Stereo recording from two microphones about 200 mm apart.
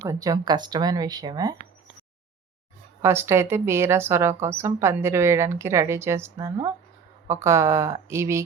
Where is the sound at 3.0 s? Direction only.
10° right (ahead or behind).